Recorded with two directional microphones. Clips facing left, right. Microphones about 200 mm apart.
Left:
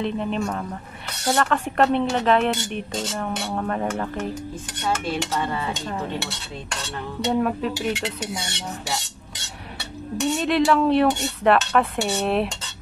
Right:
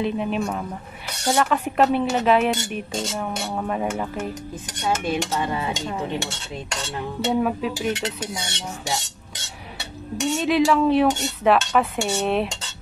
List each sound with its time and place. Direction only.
0.0 s dishes: 5° right (ahead or behind)
1.2 s cutlery: 5° right (ahead or behind)
3.5 s dishes: 5° right (ahead or behind)
7.3 s cutlery: 5° right (ahead or behind)
10.3 s cutlery: centre (ahead or behind)